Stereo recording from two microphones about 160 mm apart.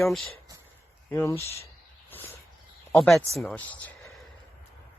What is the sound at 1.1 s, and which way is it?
Speech, 15° left (ahead or behind).